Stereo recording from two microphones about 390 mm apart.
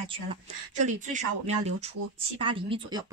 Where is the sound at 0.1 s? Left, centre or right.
Centre.